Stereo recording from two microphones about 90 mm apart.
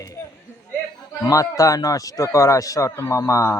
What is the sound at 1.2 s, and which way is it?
Speech, 35° left (ahead or behind).